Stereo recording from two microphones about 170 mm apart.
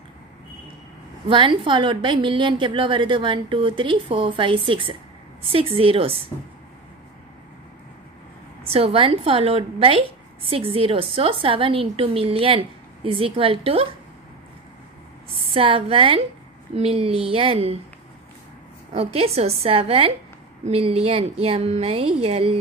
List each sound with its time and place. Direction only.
1.3 s a woman's voice: 30° right (ahead or behind)
8.6 s a woman's voice: 35° right (ahead or behind)
15.5 s a woman's voice: 35° right (ahead or behind)
18.9 s a woman's voice: 35° right (ahead or behind)